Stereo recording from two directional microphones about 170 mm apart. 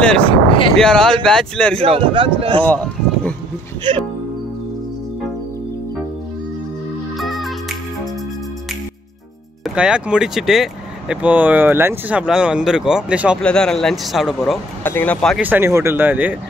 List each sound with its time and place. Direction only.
0.3 s speech: 30° left (ahead or behind)
0.7 s speech: 5° left (ahead or behind)
1.8 s speech: 30° right (ahead or behind)
2.6 s speech: 10° left (ahead or behind)
7.2 s music: centre (ahead or behind)
9.8 s speech: 5° right (ahead or behind)
13.4 s speech: 5° left (ahead or behind)
14.8 s speech: 10° left (ahead or behind)
15.3 s speech: 10° right (ahead or behind)